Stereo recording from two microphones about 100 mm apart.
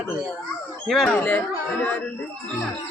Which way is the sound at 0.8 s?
Centre (ahead or behind).